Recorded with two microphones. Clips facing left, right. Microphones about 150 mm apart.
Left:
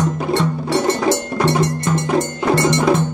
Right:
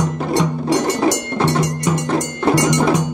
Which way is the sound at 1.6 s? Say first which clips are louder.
Left 1 dB; 10° right (ahead or behind).